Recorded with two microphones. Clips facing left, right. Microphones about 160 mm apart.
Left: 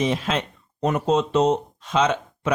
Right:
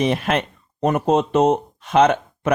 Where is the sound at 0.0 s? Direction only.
60° right (ahead or behind).